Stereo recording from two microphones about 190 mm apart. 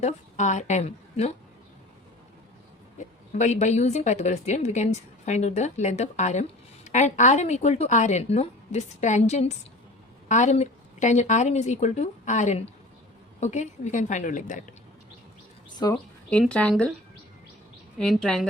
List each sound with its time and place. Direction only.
0.0 s a woman's voice: 40° left (ahead or behind)
3.3 s speech: 35° left (ahead or behind)
15.8 s speech: 20° left (ahead or behind)
16.3 s a woman's voice: 5° left (ahead or behind)
18.0 s a woman's voice: centre (ahead or behind)